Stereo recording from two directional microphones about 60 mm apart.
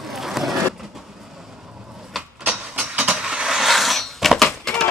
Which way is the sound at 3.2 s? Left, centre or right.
Centre.